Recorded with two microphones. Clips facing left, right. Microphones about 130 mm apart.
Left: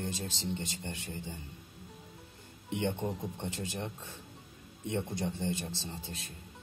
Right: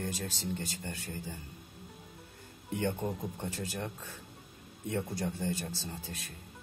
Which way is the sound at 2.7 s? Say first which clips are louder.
Even; 20° left (ahead or behind).